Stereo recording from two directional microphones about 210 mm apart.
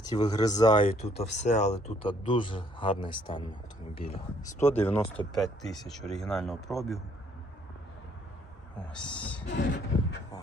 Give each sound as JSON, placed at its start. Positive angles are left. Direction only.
{"t": 0.0, "sound": "speech", "side_deg": 20}
{"t": 4.6, "sound": "speech", "side_deg": 10}
{"t": 9.1, "sound": "speech", "side_deg": 5}
{"t": 9.5, "sound": "a sound", "side_deg": 55}